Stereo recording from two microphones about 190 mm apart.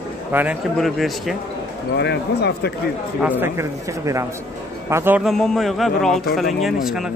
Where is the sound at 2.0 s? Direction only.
60° left (ahead or behind).